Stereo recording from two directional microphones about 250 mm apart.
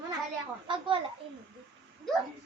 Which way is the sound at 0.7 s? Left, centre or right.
Right.